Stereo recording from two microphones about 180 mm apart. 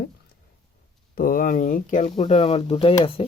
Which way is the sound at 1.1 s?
50° left (ahead or behind).